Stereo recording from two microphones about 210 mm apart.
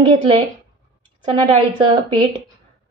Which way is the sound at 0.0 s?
25° right (ahead or behind).